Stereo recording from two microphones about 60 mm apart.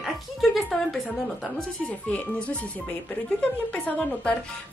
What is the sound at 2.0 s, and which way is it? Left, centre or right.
Speech, left.